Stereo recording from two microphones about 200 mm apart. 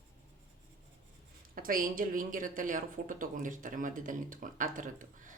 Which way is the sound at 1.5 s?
45° right (ahead or behind).